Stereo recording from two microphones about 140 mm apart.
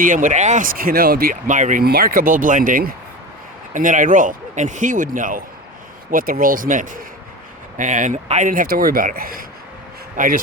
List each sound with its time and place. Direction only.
0.0 s speech: 70° right (ahead or behind)
6.1 s speech: 90° right